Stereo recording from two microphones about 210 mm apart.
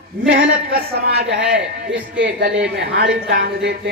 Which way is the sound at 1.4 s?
5° right (ahead or behind).